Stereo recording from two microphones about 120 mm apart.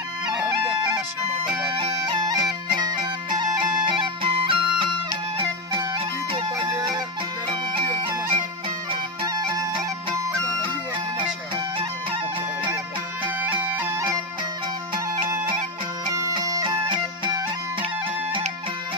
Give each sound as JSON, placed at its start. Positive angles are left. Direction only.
{"t": 1.8, "sound": "music", "side_deg": -40}
{"t": 5.9, "sound": "music", "side_deg": -50}
{"t": 13.4, "sound": "bagpipes", "side_deg": -20}
{"t": 16.1, "sound": "music", "side_deg": -30}